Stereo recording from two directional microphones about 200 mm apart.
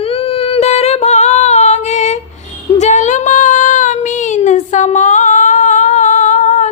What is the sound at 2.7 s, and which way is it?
Child singing, 35° left (ahead or behind).